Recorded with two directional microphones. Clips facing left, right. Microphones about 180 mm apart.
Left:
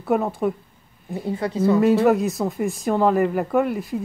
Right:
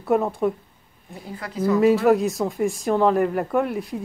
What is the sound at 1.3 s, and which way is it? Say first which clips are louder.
Speech: left 3 dB; 25° left (ahead or behind).